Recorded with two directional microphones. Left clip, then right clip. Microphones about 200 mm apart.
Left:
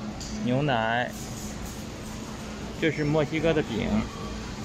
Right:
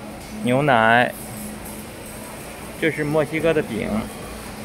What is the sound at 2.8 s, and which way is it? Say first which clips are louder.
Speech: right 5 dB; 5° right (ahead or behind).